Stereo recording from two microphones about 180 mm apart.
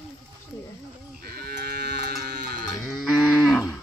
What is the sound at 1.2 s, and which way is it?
Sheep, 60° right (ahead or behind).